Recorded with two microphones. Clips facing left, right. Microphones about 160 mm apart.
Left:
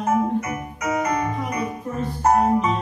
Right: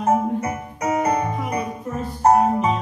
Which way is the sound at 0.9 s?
30° right (ahead or behind).